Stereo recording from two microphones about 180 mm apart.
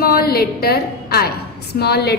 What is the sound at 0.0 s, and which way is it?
A woman's voice, 60° left (ahead or behind).